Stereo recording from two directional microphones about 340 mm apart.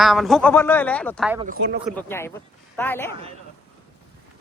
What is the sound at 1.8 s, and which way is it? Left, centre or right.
A man's voice, centre.